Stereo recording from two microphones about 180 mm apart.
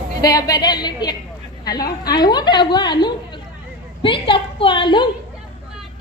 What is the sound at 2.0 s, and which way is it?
A woman's voice, 25° left (ahead or behind).